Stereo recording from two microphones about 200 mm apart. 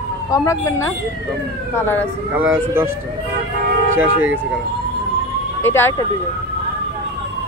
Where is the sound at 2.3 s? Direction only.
10° right (ahead or behind).